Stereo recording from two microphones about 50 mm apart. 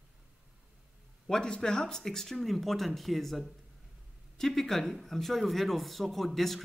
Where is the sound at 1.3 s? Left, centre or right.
Centre.